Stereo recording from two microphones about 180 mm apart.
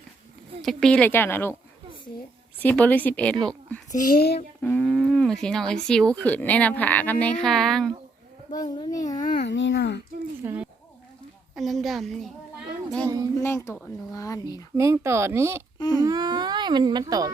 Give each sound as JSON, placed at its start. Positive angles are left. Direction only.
{"t": 0.6, "sound": "speech", "side_deg": 0}
{"t": 2.6, "sound": "speech", "side_deg": 10}
{"t": 3.9, "sound": "speech", "side_deg": 50}
{"t": 4.6, "sound": "speech", "side_deg": 5}
{"t": 8.7, "sound": "speech", "side_deg": 20}
{"t": 9.1, "sound": "speech", "side_deg": 50}
{"t": 9.5, "sound": "a child's voice", "side_deg": 90}
{"t": 10.4, "sound": "speech", "side_deg": -10}
{"t": 11.5, "sound": "a child's voice", "side_deg": 0}
{"t": 13.1, "sound": "speech", "side_deg": -20}
{"t": 13.4, "sound": "speech", "side_deg": 15}
{"t": 14.8, "sound": "speech", "side_deg": -15}
{"t": 15.8, "sound": "speech", "side_deg": 25}
{"t": 16.0, "sound": "speech", "side_deg": -20}